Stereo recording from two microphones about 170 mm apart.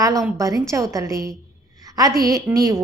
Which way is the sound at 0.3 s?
20° right (ahead or behind).